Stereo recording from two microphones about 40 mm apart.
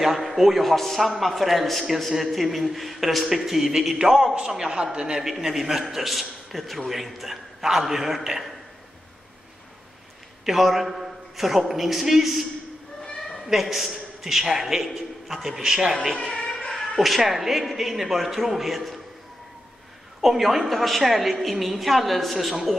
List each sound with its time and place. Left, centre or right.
0.0 s a man's voice: centre
4.5 s a man's voice: right
5.4 s a man's voice: centre
10.4 s a man's voice: centre
13.5 s a man's voice: centre
15.6 s a man's voice: right
16.2 s a sound: centre
16.7 s a man's voice: centre
20.2 s a man's voice: centre